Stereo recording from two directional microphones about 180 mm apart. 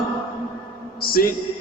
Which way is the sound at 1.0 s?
55° left (ahead or behind).